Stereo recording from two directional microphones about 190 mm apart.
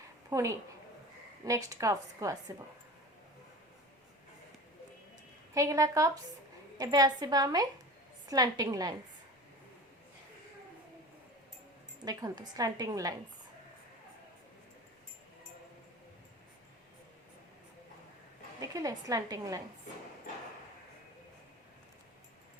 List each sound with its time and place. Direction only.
0.3 s a woman's voice: 15° right (ahead or behind)
5.5 s a woman's voice: 15° right (ahead or behind)
12.0 s a woman's voice: 20° right (ahead or behind)
18.6 s a woman's voice: 15° right (ahead or behind)